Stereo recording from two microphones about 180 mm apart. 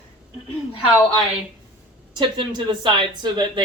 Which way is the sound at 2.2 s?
25° right (ahead or behind).